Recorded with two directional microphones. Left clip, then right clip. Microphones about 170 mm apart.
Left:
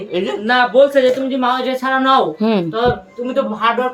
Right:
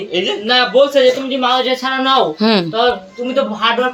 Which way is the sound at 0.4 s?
20° left (ahead or behind).